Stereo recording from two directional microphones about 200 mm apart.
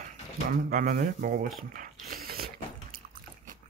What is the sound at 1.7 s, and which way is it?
Ratchet, 45° right (ahead or behind).